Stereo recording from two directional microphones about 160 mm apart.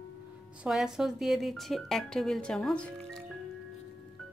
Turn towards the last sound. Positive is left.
turn(degrees=5)  # may be behind; listen again after turning